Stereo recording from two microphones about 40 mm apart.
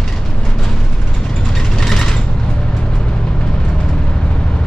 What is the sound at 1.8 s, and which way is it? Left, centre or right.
Mechanisms, centre.